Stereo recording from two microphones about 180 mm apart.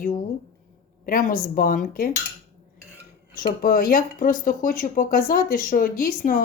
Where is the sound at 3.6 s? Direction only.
50° left (ahead or behind).